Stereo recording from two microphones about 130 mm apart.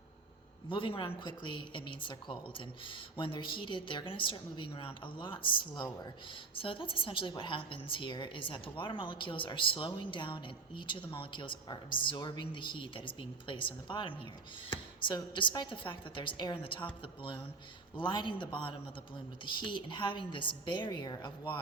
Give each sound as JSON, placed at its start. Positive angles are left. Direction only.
{"t": 0.7, "sound": "a woman's voice", "side_deg": 40}